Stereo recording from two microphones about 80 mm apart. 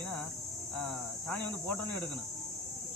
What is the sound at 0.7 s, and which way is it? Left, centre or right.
Speech, centre.